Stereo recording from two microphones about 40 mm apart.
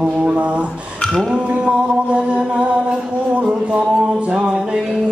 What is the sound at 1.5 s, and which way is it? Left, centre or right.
Music, right.